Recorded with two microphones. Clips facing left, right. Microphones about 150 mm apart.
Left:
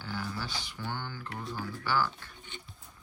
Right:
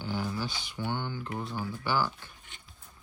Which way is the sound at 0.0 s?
20° right (ahead or behind).